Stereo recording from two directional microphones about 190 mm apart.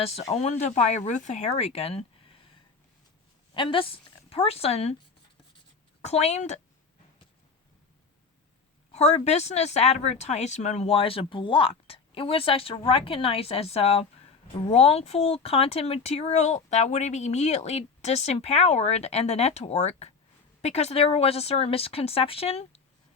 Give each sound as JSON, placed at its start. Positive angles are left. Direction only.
{"t": 0.3, "sound": "speech", "side_deg": 35}
{"t": 3.5, "sound": "a woman's voice", "side_deg": 25}
{"t": 6.0, "sound": "speech", "side_deg": 35}
{"t": 8.9, "sound": "speech", "side_deg": 35}